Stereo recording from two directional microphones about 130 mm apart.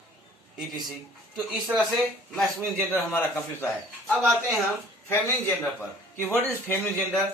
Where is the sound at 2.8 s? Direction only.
15° left (ahead or behind).